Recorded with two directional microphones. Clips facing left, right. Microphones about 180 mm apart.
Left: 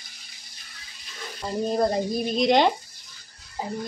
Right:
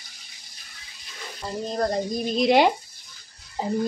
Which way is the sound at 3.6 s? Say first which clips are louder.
Right 4 dB; 30° right (ahead or behind).